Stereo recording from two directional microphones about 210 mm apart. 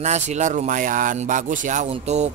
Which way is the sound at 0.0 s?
35° right (ahead or behind).